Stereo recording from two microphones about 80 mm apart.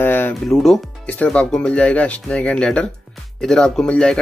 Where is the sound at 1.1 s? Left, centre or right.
Centre.